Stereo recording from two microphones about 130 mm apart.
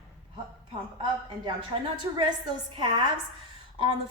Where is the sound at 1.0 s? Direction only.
35° right (ahead or behind).